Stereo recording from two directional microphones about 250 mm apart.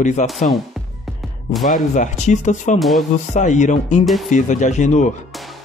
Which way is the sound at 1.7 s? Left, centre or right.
Left.